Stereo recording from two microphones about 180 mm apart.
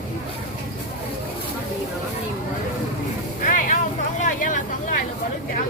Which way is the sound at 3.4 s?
45° left (ahead or behind).